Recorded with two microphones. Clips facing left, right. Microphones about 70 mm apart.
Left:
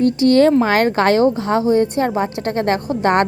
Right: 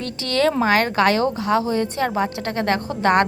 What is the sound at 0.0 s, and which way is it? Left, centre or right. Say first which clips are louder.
A woman's voice: left 8 dB; left.